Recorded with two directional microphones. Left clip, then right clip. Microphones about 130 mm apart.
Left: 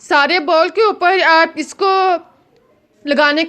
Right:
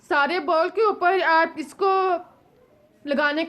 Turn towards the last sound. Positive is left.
turn(degrees=30)  # may be behind; listen again after turning